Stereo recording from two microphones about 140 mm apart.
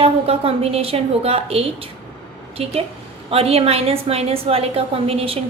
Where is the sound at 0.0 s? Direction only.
45° right (ahead or behind).